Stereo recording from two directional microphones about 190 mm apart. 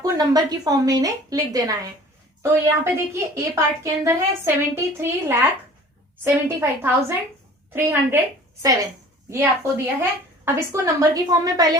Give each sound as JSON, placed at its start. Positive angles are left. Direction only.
{"t": 0.0, "sound": "a woman's voice", "side_deg": -20}
{"t": 9.3, "sound": "a woman's voice", "side_deg": -10}